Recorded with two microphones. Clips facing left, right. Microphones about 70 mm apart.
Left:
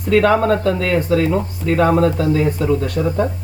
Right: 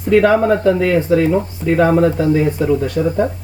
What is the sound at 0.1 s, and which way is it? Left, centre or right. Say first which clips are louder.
Speech: right 2 dB; centre.